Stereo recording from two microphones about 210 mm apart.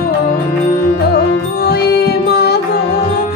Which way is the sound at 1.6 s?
50° left (ahead or behind).